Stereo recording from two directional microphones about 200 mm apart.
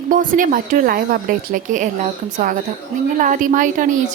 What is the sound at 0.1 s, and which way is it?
A woman's voice, 40° right (ahead or behind).